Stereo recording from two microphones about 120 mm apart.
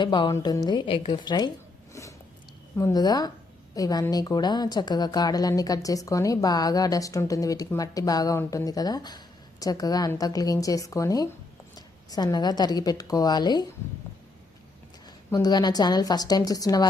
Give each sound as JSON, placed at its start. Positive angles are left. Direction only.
{"t": 0.0, "sound": "speech", "side_deg": 40}
{"t": 1.9, "sound": "a sound", "side_deg": 25}
{"t": 2.7, "sound": "a woman's voice", "side_deg": 30}
{"t": 15.0, "sound": "speech", "side_deg": 35}